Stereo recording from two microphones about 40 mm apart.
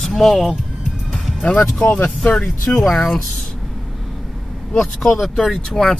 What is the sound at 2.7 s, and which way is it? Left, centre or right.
Speech, centre.